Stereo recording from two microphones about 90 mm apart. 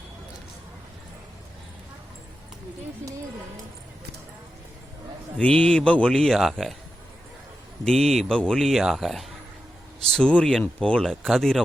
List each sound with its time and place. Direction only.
5.4 s speech: 10° left (ahead or behind)
7.9 s speech: 5° left (ahead or behind)
10.1 s speech: 10° left (ahead or behind)